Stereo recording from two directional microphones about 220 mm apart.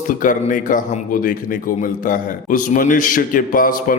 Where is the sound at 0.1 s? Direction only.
35° left (ahead or behind).